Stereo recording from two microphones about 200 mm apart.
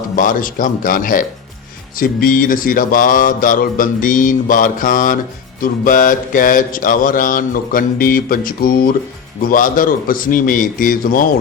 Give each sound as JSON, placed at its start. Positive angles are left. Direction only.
{"t": 0.2, "sound": "mantra", "side_deg": 40}